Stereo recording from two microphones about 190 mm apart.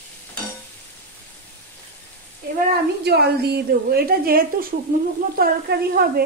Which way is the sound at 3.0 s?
55° right (ahead or behind).